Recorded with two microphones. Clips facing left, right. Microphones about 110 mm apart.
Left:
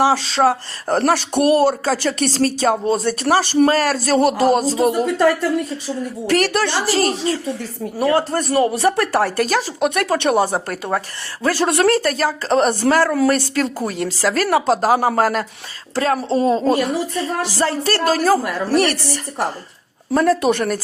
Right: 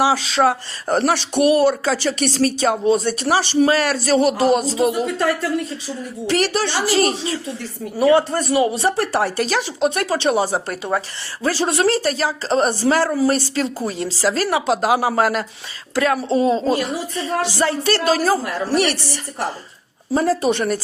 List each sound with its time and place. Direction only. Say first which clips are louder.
0.0 s speech: left 1 dB; 40° left (ahead or behind)
6.2 s speech: left 2 dB; 55° left (ahead or behind)
6.8 s speech: even; 40° left (ahead or behind)
8.7 s speech: left 2 dB; 60° left (ahead or behind)
20.1 s speech: left 2 dB; 60° left (ahead or behind)